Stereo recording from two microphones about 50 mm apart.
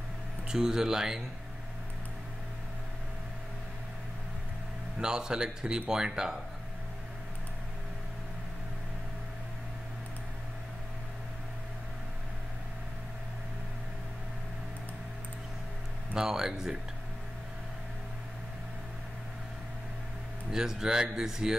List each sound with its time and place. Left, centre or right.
0.5 s speech: centre
5.0 s speech: centre
16.2 s speech: centre
20.5 s speech: centre